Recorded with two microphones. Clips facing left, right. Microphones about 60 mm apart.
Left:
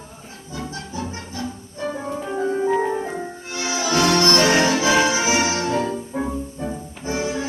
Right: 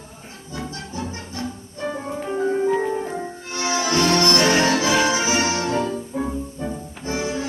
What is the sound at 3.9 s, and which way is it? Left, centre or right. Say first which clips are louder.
Music: left 2 dB; centre.